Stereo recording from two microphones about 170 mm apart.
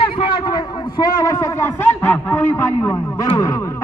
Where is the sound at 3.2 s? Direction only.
20° left (ahead or behind).